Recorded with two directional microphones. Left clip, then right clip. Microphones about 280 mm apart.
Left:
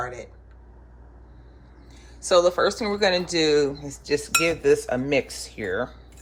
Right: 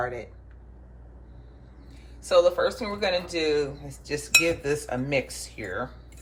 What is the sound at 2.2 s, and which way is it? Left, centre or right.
Speech, left.